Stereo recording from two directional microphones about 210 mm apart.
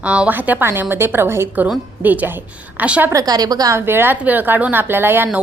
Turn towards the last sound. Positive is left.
turn(degrees=-10)  # may be behind; listen again after turning